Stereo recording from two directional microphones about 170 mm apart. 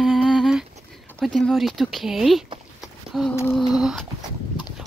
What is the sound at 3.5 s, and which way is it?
Speech, centre (ahead or behind).